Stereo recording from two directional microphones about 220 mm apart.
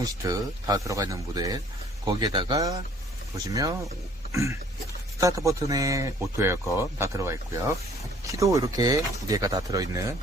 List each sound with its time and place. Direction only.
0.0 s speech: 15° right (ahead or behind)
4.3 s a sound: 15° right (ahead or behind)
5.2 s speech: 15° right (ahead or behind)